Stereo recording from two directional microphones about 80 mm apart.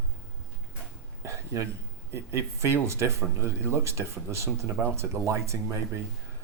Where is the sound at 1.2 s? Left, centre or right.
Right.